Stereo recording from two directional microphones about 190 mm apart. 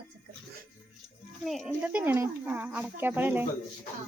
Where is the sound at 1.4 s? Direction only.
Centre (ahead or behind).